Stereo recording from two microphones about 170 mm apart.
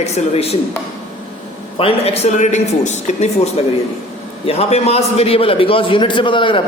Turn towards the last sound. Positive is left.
turn(degrees=30)  # may be behind; listen again after turning